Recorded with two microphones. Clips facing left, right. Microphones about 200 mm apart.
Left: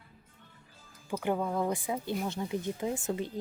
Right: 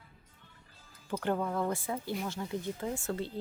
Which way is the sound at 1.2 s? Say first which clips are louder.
Left 1 dB; 10° left (ahead or behind).